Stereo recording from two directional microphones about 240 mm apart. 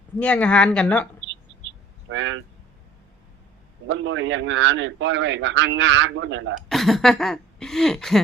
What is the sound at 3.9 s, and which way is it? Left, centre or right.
A man's voice, right.